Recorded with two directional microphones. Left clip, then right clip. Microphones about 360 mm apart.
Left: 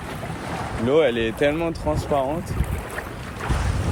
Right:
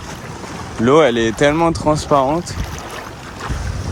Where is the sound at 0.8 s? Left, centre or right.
Centre.